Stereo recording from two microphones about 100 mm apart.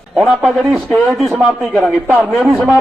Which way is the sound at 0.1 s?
5° right (ahead or behind).